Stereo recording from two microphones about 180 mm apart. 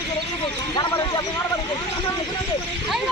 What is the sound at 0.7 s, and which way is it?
Speech, 25° left (ahead or behind).